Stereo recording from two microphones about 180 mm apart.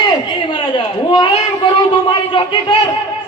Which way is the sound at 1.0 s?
25° left (ahead or behind).